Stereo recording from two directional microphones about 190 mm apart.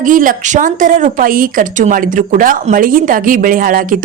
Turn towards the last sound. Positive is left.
turn(degrees=-45)  # may be behind; listen again after turning